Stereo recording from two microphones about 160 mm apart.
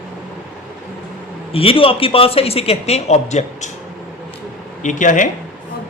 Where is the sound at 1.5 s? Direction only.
35° left (ahead or behind).